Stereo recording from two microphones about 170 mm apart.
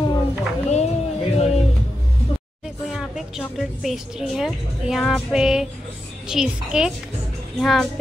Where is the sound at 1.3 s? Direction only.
40° left (ahead or behind).